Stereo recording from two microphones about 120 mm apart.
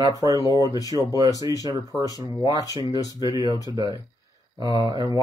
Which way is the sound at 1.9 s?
5° left (ahead or behind).